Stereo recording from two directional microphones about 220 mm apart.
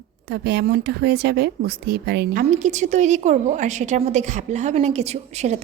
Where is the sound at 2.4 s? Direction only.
35° right (ahead or behind).